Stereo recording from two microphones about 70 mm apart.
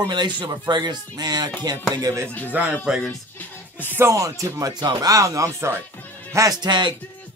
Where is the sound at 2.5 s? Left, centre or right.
Right.